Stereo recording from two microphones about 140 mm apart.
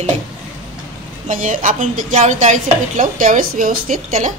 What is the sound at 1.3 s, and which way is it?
Speech, 70° right (ahead or behind).